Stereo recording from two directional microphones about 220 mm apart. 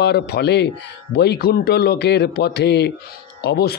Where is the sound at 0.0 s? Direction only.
50° left (ahead or behind).